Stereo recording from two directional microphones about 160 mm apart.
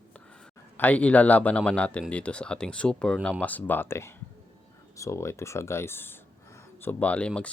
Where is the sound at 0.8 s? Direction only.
10° left (ahead or behind).